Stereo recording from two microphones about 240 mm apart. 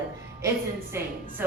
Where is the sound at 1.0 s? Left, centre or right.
Centre.